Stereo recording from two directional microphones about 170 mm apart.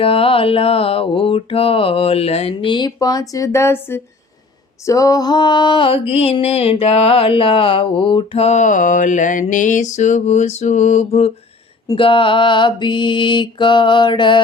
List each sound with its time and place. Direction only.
0.0 s mantra: 35° left (ahead or behind)
11.9 s mantra: 30° left (ahead or behind)